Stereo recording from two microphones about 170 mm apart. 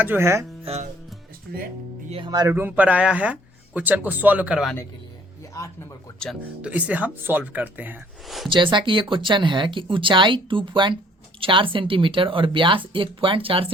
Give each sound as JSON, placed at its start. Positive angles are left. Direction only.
{"t": 0.0, "sound": "speech", "side_deg": -15}
{"t": 0.6, "sound": "speech", "side_deg": -40}
{"t": 1.5, "sound": "speech", "side_deg": -65}
{"t": 2.0, "sound": "speech", "side_deg": -30}
{"t": 6.6, "sound": "speech", "side_deg": -10}
{"t": 8.4, "sound": "speech", "side_deg": -30}